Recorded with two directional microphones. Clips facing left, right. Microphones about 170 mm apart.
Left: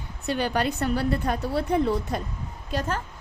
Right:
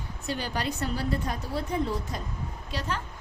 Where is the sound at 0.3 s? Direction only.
60° left (ahead or behind).